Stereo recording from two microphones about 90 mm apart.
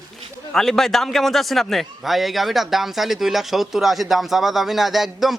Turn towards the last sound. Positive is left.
turn(degrees=0)  # may be behind; listen again after turning